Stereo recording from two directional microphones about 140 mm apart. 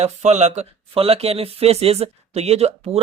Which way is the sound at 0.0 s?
55° right (ahead or behind).